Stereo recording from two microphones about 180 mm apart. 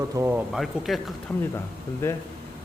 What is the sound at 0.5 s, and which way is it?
Speech, centre (ahead or behind).